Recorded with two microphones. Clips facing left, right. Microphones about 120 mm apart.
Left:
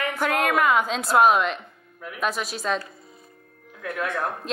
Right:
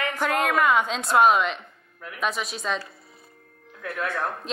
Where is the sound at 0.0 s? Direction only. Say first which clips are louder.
Left 1 dB; 10° left (ahead or behind).